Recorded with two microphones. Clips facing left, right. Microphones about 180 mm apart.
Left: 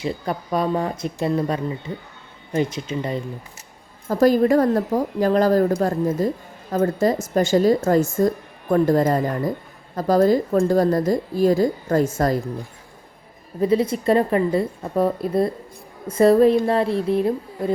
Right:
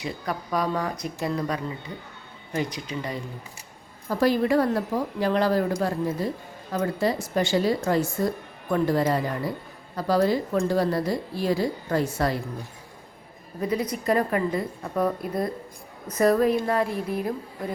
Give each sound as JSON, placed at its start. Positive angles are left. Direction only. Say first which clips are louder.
{"t": 0.0, "sound": "a woman's voice", "louder": "left 5 dB", "side_deg": 25}
{"t": 4.1, "sound": "speech", "louder": "left 6 dB", "side_deg": 45}
{"t": 13.6, "sound": "a woman's voice", "louder": "left 8 dB", "side_deg": 25}